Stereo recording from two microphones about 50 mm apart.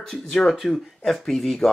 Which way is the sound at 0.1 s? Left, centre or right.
Centre.